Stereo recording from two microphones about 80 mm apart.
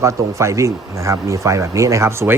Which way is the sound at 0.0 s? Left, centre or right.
Right.